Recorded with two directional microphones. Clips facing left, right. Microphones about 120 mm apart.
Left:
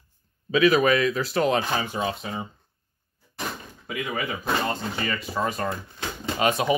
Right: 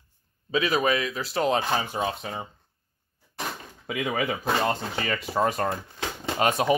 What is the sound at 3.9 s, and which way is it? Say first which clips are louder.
Speech: right 2 dB; 90° right.